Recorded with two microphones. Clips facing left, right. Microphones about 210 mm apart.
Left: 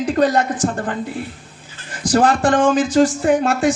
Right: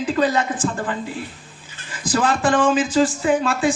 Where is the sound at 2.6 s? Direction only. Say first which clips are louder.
Left 3 dB; 45° left (ahead or behind).